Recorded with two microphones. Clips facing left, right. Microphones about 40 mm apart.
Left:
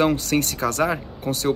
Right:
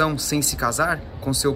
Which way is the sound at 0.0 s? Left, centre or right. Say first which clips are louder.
Left 2 dB; left.